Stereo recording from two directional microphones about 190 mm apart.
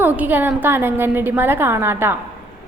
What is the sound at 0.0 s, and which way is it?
A woman's voice, 10° right (ahead or behind).